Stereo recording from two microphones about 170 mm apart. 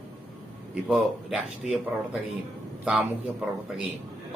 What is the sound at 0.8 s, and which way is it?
Speech, 5° right (ahead or behind).